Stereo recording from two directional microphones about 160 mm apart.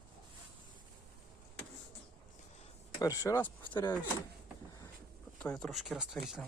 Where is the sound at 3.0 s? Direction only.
20° left (ahead or behind).